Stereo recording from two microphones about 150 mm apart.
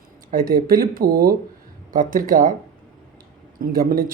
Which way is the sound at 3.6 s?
75° right (ahead or behind).